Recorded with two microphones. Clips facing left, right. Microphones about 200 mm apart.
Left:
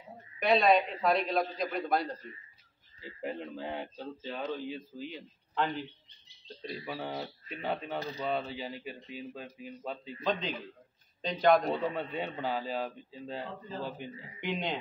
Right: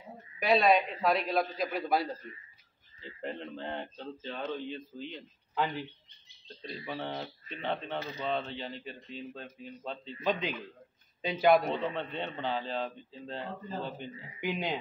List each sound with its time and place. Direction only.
0.4 s a man's voice: centre (ahead or behind)
3.0 s a man's voice: 5° left (ahead or behind)
11.2 s speech: 5° right (ahead or behind)
11.7 s speech: 5° left (ahead or behind)
14.4 s a man's voice: 5° right (ahead or behind)